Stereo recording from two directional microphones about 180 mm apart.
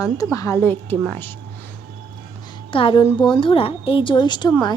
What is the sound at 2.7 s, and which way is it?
A woman's voice, 30° left (ahead or behind).